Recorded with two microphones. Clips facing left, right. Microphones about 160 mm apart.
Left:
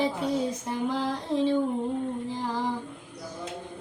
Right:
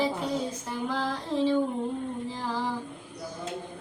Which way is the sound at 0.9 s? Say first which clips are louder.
Left 1 dB; 15° left (ahead or behind).